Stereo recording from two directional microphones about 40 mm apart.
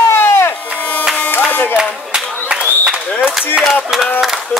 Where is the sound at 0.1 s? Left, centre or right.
Left.